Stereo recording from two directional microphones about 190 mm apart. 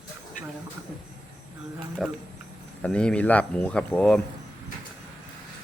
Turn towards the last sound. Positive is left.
turn(degrees=5)  # may be behind; listen again after turning